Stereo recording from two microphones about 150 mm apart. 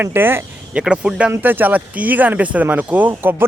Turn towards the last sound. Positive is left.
turn(degrees=-15)  # may be behind; listen again after turning